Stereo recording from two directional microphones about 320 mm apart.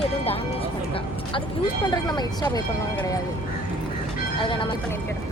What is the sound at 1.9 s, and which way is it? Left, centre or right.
Speech, centre.